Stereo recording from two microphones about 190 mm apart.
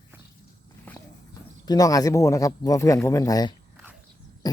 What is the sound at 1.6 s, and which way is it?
Speech, 20° left (ahead or behind).